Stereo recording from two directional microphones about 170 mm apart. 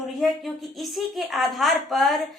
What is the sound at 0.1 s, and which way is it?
A woman's voice, centre (ahead or behind).